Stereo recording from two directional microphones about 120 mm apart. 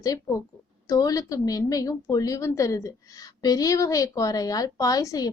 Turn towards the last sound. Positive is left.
turn(degrees=30)  # may be behind; listen again after turning